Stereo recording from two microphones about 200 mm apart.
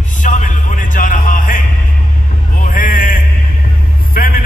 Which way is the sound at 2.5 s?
40° left (ahead or behind).